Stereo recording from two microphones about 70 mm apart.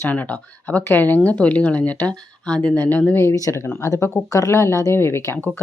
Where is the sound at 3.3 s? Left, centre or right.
Left.